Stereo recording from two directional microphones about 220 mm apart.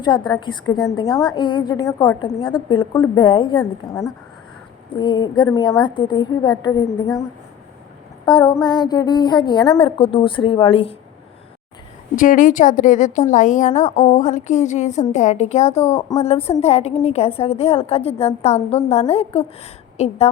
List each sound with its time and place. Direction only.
0.0 s a woman's voice: 20° left (ahead or behind)
8.2 s a woman's voice: 20° left (ahead or behind)
12.1 s a woman's voice: 35° left (ahead or behind)
15.7 s speech: 10° left (ahead or behind)
16.1 s a woman's voice: 30° left (ahead or behind)